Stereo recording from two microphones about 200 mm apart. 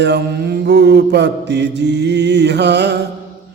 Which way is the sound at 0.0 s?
60° right (ahead or behind).